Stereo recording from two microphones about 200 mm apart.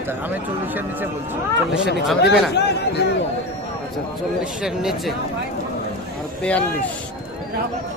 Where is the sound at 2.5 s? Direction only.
55° left (ahead or behind).